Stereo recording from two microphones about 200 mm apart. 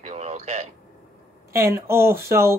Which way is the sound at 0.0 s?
35° right (ahead or behind).